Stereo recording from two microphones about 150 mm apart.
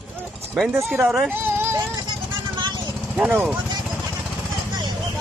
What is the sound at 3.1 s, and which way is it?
Speech, 10° right (ahead or behind).